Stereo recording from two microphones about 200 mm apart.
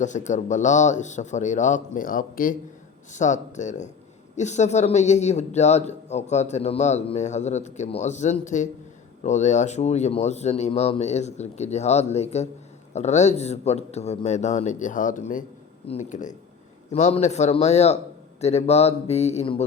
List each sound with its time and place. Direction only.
0.0 s speech: 35° left (ahead or behind)